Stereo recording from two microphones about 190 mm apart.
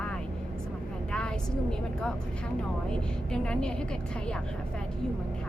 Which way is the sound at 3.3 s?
5° left (ahead or behind).